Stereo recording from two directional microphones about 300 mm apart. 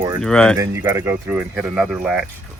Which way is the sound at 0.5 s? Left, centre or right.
Centre.